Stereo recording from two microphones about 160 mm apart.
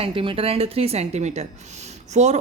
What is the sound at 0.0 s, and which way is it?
A woman's voice, 35° right (ahead or behind).